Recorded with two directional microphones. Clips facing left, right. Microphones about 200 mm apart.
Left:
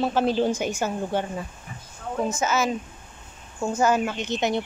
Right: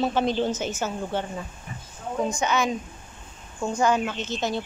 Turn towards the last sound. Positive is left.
turn(degrees=20)  # may be behind; listen again after turning